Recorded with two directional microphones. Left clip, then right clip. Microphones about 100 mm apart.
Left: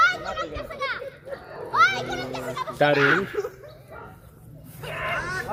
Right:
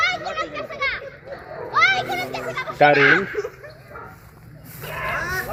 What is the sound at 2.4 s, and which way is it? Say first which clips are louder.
Children playing: right 6 dB; 10° left (ahead or behind).